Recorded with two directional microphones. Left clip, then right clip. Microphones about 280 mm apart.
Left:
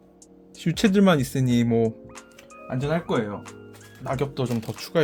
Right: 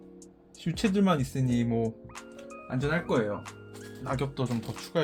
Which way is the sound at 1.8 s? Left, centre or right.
Centre.